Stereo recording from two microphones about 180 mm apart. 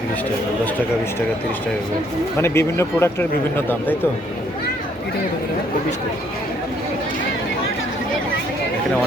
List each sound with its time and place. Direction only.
2.4 s speech: 15° left (ahead or behind)